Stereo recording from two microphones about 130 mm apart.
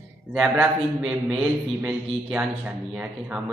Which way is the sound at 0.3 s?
5° right (ahead or behind).